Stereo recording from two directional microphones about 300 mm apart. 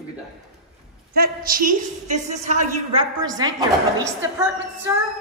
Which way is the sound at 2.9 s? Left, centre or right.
Centre.